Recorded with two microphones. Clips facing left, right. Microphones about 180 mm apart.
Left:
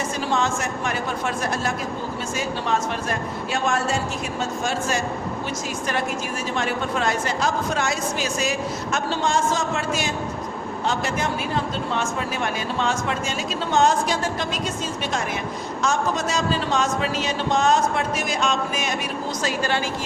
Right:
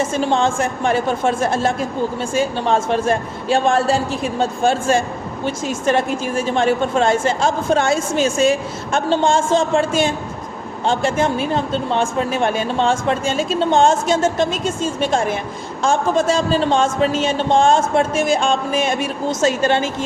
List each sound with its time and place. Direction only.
0.0 s speech: 25° right (ahead or behind)